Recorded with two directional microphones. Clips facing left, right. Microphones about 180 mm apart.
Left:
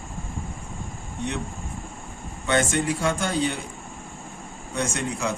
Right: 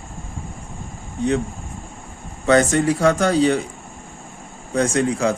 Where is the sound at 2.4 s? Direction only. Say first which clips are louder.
Right 7 dB; 40° right (ahead or behind).